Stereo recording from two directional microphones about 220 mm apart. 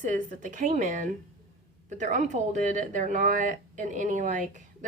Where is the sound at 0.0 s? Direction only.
35° right (ahead or behind).